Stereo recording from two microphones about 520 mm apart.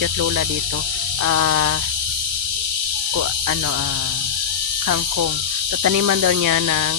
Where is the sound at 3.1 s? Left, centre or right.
Right.